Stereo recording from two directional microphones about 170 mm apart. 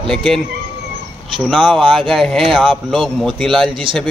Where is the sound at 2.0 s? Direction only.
Centre (ahead or behind).